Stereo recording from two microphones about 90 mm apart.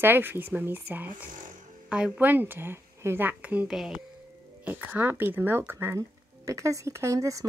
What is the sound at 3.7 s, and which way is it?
Speech, 5° right (ahead or behind).